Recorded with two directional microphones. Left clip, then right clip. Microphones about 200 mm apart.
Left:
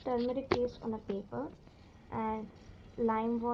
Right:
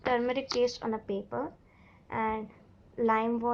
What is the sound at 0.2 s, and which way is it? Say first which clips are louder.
A woman's voice: right 4 dB; 30° right (ahead or behind).